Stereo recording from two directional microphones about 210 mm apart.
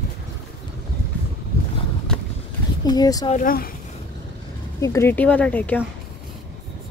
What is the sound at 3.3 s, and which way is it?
Speech, 45° left (ahead or behind).